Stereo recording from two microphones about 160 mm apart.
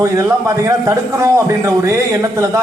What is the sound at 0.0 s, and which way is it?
A man's voice, 20° right (ahead or behind).